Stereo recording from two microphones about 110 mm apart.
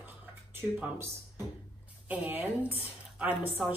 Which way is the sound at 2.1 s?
15° right (ahead or behind).